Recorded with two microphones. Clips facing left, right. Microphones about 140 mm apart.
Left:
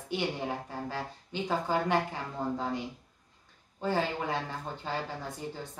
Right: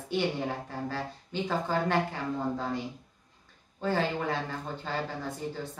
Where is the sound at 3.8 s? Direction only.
15° left (ahead or behind).